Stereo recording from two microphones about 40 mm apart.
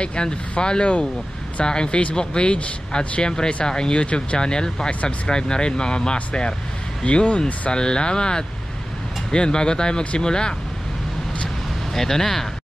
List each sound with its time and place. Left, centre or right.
0.0 s speech: left
11.9 s speech: centre